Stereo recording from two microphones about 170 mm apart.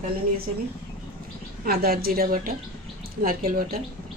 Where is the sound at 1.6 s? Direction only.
65° right (ahead or behind).